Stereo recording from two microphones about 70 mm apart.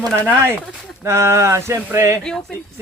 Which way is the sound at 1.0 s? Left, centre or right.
Right.